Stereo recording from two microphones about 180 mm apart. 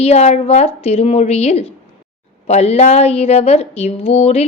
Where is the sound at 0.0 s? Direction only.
35° left (ahead or behind).